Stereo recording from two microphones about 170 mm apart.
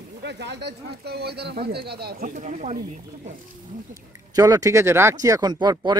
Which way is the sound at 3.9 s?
20° right (ahead or behind).